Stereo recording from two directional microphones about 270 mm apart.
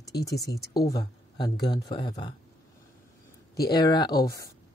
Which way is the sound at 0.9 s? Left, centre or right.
Centre.